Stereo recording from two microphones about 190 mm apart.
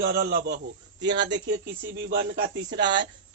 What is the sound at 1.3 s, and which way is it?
Speech, 70° right (ahead or behind).